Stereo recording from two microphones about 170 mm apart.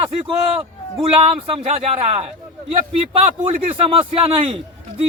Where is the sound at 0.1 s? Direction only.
30° right (ahead or behind).